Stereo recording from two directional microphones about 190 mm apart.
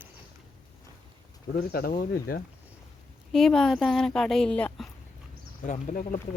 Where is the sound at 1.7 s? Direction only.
50° left (ahead or behind).